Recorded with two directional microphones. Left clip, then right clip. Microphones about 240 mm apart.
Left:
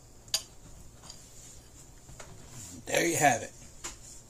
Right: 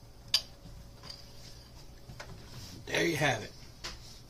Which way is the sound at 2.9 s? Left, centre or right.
Left.